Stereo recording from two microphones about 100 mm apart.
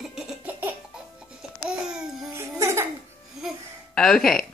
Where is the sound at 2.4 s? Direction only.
25° right (ahead or behind).